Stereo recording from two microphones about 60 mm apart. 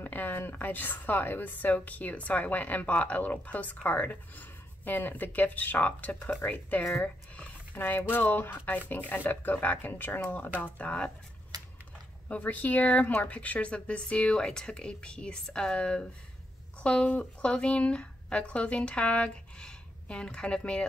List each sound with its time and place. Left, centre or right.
0.0 s a woman's voice: left
10.6 s a woman's voice: left
12.3 s a woman's voice: left